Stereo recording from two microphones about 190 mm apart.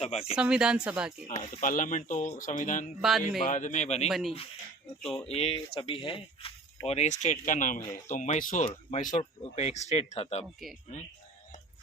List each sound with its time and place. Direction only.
0.0 s speech: 30° left (ahead or behind)
0.3 s speech: 5° right (ahead or behind)
1.3 s speech: 40° left (ahead or behind)
3.0 s speech: centre (ahead or behind)
3.4 s speech: 40° left (ahead or behind)
4.1 s speech: centre (ahead or behind)
5.3 s speech: 30° left (ahead or behind)
10.6 s speech: centre (ahead or behind)